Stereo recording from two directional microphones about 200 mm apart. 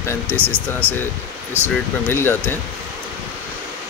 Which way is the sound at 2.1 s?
10° left (ahead or behind).